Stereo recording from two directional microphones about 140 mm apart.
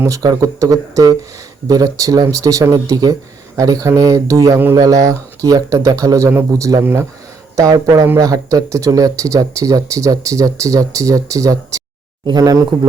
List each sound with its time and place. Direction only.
0.0 s speech: 25° right (ahead or behind)